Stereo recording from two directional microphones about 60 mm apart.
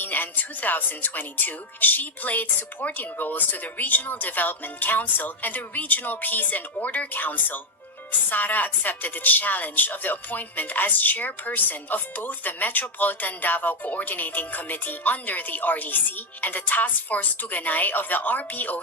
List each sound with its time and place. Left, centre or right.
0.0 s a woman's voice: left